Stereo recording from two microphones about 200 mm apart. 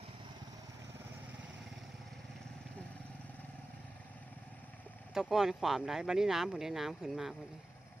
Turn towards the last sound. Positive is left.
turn(degrees=0)  # may be behind; listen again after turning